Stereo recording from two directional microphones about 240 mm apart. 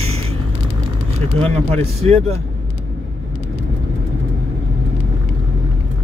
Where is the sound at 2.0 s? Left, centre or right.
Right.